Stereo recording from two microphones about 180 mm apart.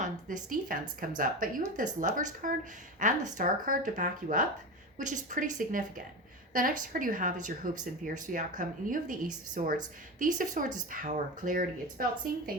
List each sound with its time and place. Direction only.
0.0 s speech: 45° right (ahead or behind)